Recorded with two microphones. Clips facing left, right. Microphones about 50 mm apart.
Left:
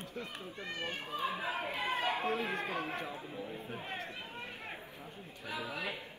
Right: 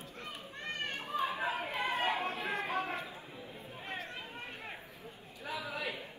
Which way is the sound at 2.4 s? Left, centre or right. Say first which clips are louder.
Right 1 dB; right.